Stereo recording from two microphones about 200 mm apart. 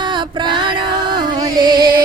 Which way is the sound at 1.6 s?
20° right (ahead or behind).